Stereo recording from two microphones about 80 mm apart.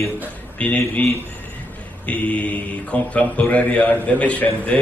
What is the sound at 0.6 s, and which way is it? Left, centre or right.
Speech, centre.